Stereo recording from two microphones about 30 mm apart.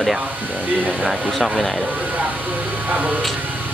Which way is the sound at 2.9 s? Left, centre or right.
Right.